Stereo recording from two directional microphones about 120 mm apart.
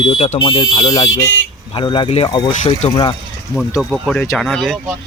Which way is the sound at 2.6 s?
65° left (ahead or behind).